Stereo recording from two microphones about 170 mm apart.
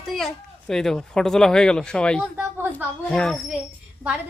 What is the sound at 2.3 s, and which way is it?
Speech, 10° right (ahead or behind).